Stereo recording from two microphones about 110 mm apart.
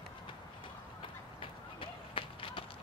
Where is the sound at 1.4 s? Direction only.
55° left (ahead or behind).